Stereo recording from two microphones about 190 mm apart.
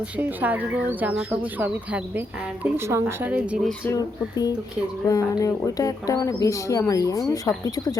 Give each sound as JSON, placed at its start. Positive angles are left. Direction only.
{"t": 0.2, "sound": "speech", "side_deg": -10}
{"t": 3.9, "sound": "speech", "side_deg": 20}